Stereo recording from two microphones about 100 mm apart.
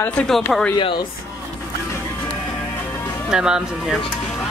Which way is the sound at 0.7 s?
50° left (ahead or behind).